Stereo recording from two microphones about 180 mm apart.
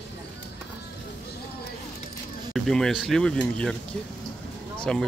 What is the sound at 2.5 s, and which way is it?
Speech, centre (ahead or behind).